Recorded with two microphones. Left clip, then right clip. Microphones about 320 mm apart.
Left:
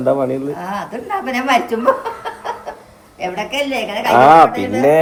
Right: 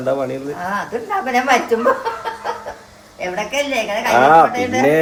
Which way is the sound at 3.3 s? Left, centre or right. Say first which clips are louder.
Right 1 dB; centre.